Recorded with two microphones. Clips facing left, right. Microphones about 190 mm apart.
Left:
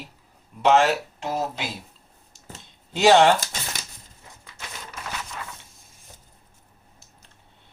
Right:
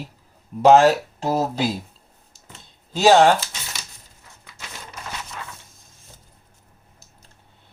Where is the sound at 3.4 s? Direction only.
50° left (ahead or behind).